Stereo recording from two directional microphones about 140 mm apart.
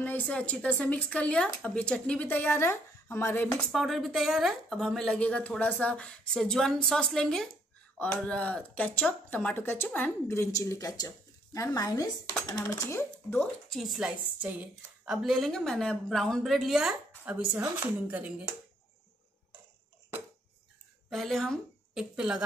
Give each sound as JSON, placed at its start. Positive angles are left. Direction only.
{"t": 0.0, "sound": "speech", "side_deg": 10}
{"t": 3.6, "sound": "a woman's voice", "side_deg": 0}
{"t": 13.7, "sound": "a woman's voice", "side_deg": 0}
{"t": 17.2, "sound": "speech", "side_deg": -10}
{"t": 21.1, "sound": "a woman's voice", "side_deg": 0}